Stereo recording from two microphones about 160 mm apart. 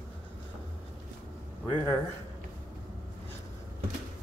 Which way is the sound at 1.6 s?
15° left (ahead or behind).